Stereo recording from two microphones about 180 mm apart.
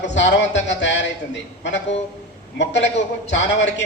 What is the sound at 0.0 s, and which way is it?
Speech, 80° left.